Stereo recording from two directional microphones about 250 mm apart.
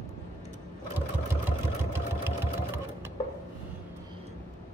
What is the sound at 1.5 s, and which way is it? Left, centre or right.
Vehicle, centre.